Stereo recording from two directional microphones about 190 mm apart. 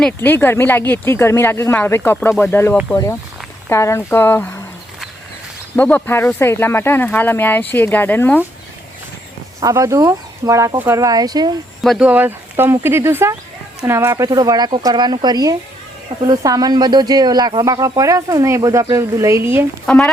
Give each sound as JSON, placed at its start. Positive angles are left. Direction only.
{"t": 0.0, "sound": "speech", "side_deg": 10}
{"t": 5.7, "sound": "speech", "side_deg": 10}
{"t": 9.6, "sound": "speech", "side_deg": -15}
{"t": 11.8, "sound": "speech", "side_deg": 0}
{"t": 19.8, "sound": "speech", "side_deg": 5}